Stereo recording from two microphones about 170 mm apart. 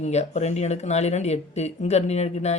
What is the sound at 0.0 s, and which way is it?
Speech, 40° left (ahead or behind).